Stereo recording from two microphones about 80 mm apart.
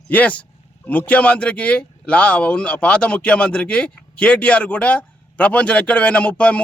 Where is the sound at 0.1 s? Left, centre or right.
Centre.